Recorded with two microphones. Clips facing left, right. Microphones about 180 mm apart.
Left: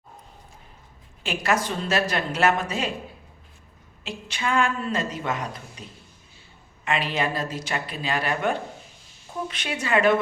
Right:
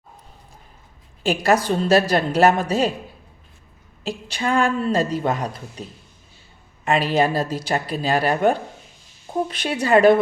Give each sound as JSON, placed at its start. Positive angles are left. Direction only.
{"t": 1.2, "sound": "a woman's voice", "side_deg": -35}
{"t": 4.0, "sound": "a woman's voice", "side_deg": -40}
{"t": 6.8, "sound": "a woman's voice", "side_deg": -35}